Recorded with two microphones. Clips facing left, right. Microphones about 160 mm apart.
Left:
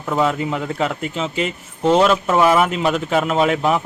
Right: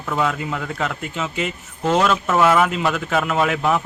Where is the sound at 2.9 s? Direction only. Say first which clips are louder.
Left 3 dB; 25° left (ahead or behind).